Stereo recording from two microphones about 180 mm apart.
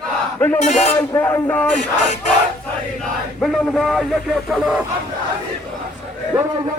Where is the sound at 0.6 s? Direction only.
40° left (ahead or behind).